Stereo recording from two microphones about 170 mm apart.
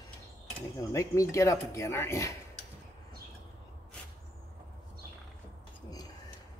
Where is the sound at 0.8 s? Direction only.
20° left (ahead or behind).